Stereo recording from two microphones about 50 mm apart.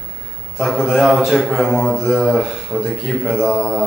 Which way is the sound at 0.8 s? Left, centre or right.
Centre.